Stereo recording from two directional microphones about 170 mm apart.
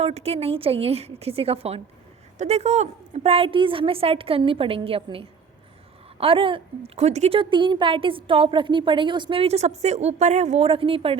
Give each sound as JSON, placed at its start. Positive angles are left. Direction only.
{"t": 0.0, "sound": "a woman's voice", "side_deg": -40}